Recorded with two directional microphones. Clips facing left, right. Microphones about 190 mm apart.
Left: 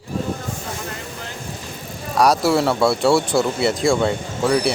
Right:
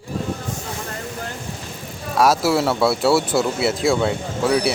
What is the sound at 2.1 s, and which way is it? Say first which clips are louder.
Speech: left 1 dB; centre (ahead or behind).